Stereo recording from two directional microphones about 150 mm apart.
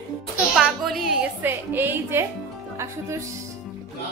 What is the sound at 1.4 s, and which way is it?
A woman's voice, 15° right (ahead or behind).